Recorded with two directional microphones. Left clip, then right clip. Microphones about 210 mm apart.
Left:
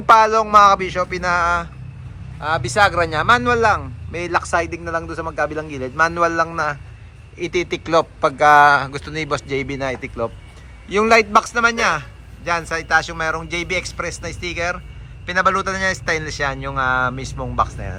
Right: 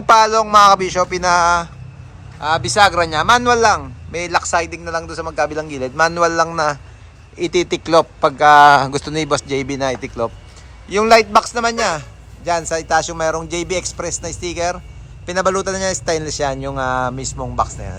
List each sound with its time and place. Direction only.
0.0 s a man's voice: 5° right (ahead or behind)